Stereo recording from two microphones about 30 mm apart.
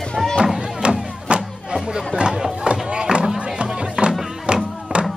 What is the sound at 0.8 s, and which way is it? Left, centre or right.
Music, right.